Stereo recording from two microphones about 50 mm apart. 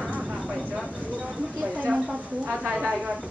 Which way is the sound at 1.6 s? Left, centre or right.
Right.